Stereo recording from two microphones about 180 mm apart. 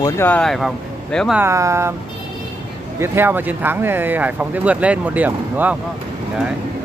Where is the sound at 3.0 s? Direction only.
10° right (ahead or behind).